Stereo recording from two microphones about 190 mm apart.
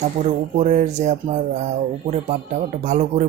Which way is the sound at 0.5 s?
40° right (ahead or behind).